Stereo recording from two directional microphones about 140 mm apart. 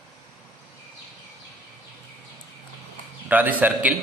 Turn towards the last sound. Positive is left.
turn(degrees=-10)  # may be behind; listen again after turning